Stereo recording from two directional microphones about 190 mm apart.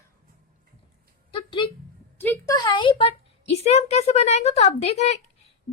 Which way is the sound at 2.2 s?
10° left (ahead or behind).